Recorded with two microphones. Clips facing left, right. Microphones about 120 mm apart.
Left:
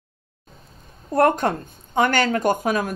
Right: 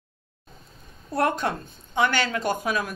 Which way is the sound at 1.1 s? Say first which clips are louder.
Left 6 dB; 50° left (ahead or behind).